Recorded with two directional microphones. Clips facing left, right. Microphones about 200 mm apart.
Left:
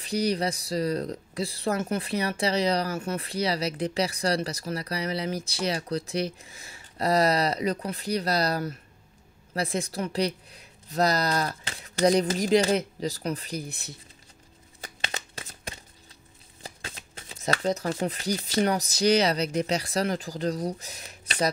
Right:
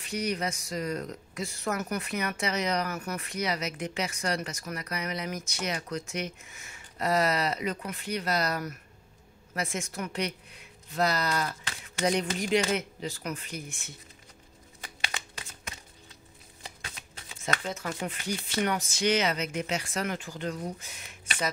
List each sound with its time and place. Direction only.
0.0 s speech: 35° left (ahead or behind)
14.8 s a sound: 35° left (ahead or behind)
16.6 s speech: 35° left (ahead or behind)